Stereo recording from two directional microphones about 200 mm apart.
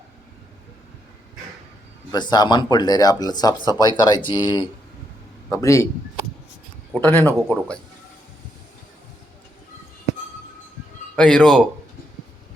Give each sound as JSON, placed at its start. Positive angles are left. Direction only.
{"t": 2.1, "sound": "a man's voice", "side_deg": 20}
{"t": 6.9, "sound": "a man's voice", "side_deg": 10}
{"t": 7.3, "sound": "speech", "side_deg": 0}
{"t": 11.2, "sound": "speech", "side_deg": 5}